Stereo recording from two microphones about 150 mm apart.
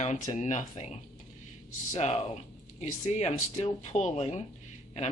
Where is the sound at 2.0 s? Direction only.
45° left (ahead or behind).